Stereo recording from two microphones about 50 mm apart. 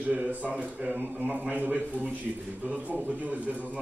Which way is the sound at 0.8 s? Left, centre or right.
Right.